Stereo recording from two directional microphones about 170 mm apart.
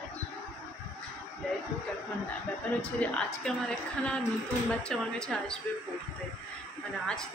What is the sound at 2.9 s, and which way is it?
A woman's voice, 5° left (ahead or behind).